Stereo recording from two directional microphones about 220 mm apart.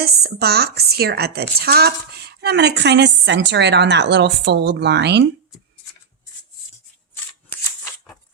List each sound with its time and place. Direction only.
0.0 s speech: 45° right (ahead or behind)